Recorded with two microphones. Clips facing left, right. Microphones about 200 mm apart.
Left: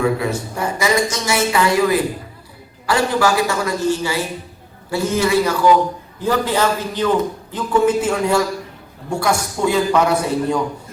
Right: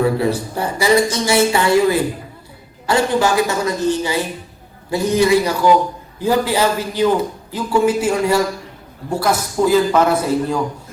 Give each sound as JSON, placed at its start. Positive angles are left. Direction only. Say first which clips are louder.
{"t": 0.0, "sound": "a man's voice", "louder": "right 2 dB", "side_deg": -30}